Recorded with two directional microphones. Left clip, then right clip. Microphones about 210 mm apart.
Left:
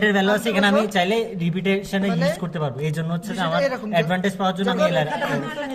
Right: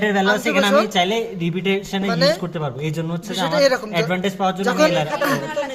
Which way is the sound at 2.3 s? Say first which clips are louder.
Right 1 dB; 5° right (ahead or behind).